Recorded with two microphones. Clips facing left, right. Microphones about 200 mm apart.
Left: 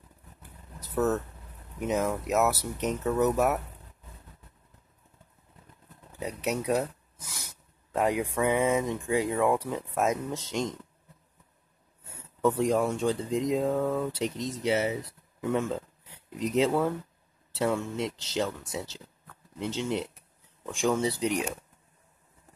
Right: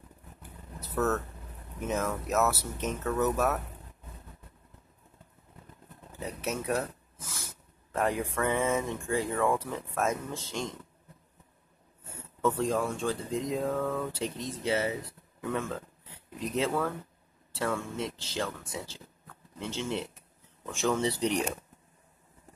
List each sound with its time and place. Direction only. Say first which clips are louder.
0.7 s vehicle: left 2 dB; 15° left (ahead or behind)
1.8 s speech: left 3 dB; 15° left (ahead or behind)
6.1 s speech: left 3 dB; 15° left (ahead or behind)
12.4 s speech: left 3 dB; 15° left (ahead or behind)